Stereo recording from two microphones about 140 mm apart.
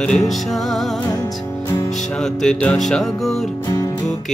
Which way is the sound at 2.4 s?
5° left (ahead or behind).